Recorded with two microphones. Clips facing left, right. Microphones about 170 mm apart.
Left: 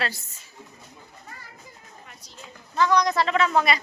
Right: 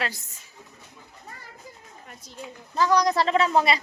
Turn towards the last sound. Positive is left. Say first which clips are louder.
# right 1 dB
turn(degrees=-30)  # may be behind; listen again after turning